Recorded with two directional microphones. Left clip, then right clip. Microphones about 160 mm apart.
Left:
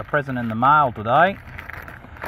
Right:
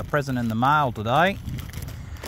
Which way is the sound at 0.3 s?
30° right (ahead or behind).